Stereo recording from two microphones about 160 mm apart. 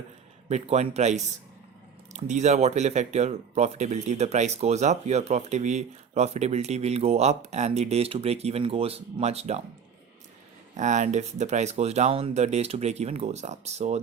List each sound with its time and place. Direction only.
0.4 s speech: 45° right (ahead or behind)
10.8 s speech: 50° right (ahead or behind)